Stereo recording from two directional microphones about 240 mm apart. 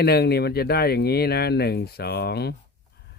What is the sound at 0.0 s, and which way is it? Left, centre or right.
Speech, left.